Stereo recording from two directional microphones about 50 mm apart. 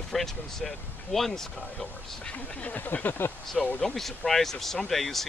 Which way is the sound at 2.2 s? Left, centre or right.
Left.